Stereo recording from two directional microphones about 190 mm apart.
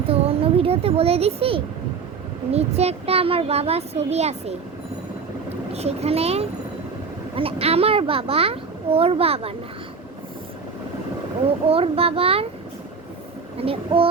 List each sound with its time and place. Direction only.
0.1 s a sound: 30° right (ahead or behind)
2.5 s speech: 35° right (ahead or behind)
5.7 s speech: 35° right (ahead or behind)
11.6 s speech: 30° right (ahead or behind)
13.6 s speech: 30° right (ahead or behind)